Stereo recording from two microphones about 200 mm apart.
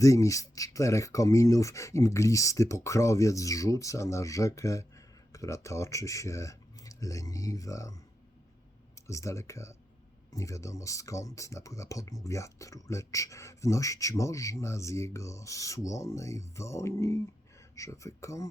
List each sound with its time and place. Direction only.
0.0 s speech: 15° left (ahead or behind)
9.0 s speech: 15° left (ahead or behind)